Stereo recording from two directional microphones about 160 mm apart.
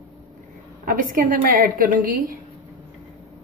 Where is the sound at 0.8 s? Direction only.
60° right (ahead or behind).